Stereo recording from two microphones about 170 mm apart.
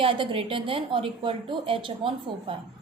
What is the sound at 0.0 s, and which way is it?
A woman's voice, 30° right (ahead or behind).